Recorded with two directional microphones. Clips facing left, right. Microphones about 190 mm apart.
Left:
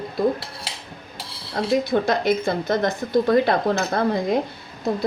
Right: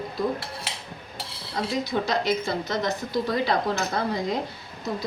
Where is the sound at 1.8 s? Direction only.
55° left (ahead or behind).